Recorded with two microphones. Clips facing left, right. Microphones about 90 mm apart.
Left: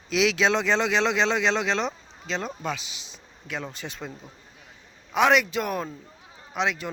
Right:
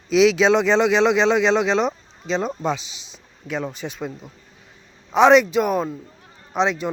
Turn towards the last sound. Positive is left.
turn(degrees=-25)  # may be behind; listen again after turning